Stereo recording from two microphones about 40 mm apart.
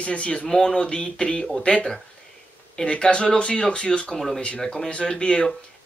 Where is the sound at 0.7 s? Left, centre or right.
Left.